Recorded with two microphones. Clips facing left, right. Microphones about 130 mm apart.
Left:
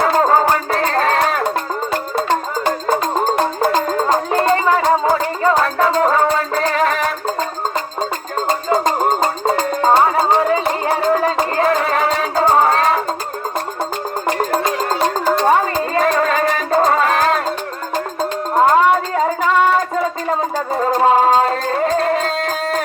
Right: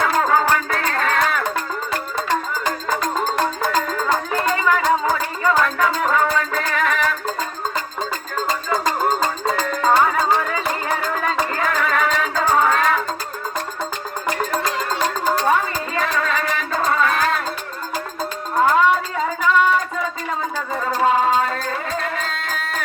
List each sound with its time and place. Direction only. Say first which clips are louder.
0.0 s music: left 4 dB; 35° left (ahead or behind)
2.6 s music: left 7 dB; 30° left (ahead or behind)
8.4 s music: left 5 dB; 30° left (ahead or behind)
14.3 s music: left 4 dB; 30° left (ahead or behind)
18.7 s music: left 4 dB; 45° left (ahead or behind)
20.7 s music: left 5 dB; 40° left (ahead or behind)